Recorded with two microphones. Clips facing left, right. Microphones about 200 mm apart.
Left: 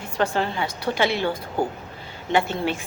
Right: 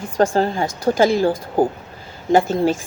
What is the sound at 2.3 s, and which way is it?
Speech, 40° right (ahead or behind).